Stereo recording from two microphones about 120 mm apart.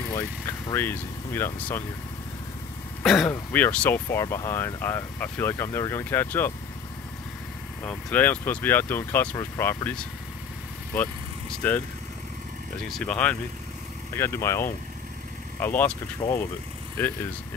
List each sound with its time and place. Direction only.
0.1 s speech: 30° left (ahead or behind)
0.7 s speech: 20° left (ahead or behind)
3.0 s vehicle: centre (ahead or behind)
3.3 s speech: 15° left (ahead or behind)
7.8 s speech: 15° left (ahead or behind)
11.6 s speech: 15° left (ahead or behind)
13.0 s speech: 10° left (ahead or behind)
14.1 s speech: 20° left (ahead or behind)
16.2 s speech: 40° left (ahead or behind)
17.0 s speech: 15° left (ahead or behind)